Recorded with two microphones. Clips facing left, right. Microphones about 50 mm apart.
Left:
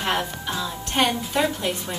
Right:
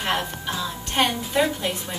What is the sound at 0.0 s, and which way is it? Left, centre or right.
A woman's voice, centre.